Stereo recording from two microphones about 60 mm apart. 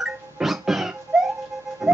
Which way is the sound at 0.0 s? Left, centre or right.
Centre.